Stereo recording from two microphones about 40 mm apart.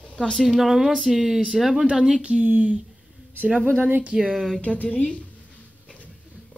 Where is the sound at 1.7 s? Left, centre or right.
Centre.